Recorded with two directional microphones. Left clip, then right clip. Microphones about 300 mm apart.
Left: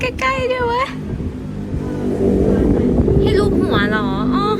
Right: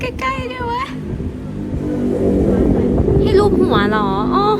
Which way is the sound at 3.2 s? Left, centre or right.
Centre.